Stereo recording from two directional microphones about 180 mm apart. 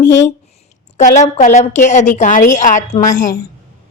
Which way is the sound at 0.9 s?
40° left (ahead or behind).